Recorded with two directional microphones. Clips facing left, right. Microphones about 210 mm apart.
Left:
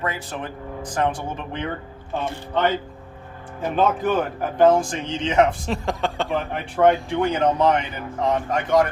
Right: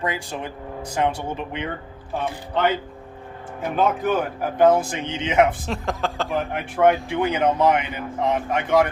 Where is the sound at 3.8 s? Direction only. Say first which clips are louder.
Left 1 dB; centre (ahead or behind).